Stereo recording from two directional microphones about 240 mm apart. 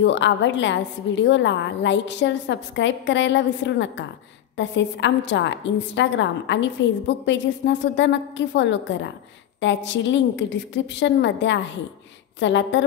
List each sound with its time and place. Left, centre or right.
0.0 s a woman's voice: left